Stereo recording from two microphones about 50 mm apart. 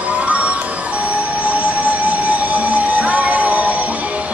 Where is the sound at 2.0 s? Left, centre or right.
Right.